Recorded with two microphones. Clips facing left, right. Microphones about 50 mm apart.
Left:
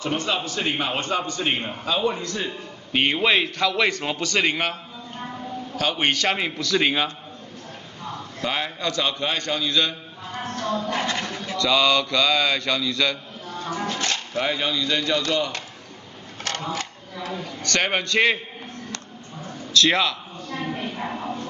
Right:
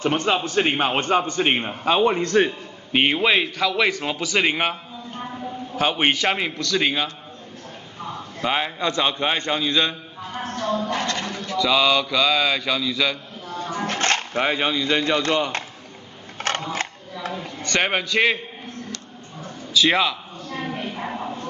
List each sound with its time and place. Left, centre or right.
0.0 s a man's voice: right
2.9 s a man's voice: centre
5.8 s a man's voice: right
6.3 s a man's voice: centre
8.4 s a man's voice: centre
10.9 s speech: centre
11.5 s a man's voice: centre
13.8 s music: right
14.4 s a man's voice: right
16.3 s a sound: right
17.3 s a man's voice: centre
19.7 s a sound: centre